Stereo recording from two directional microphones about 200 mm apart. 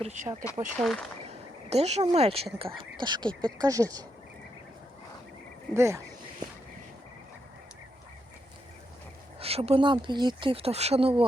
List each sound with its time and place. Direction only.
0.0 s speech: 35° right (ahead or behind)
0.8 s speech: centre (ahead or behind)
1.3 s speech: 30° right (ahead or behind)
5.7 s speech: 15° right (ahead or behind)
9.4 s speech: 30° right (ahead or behind)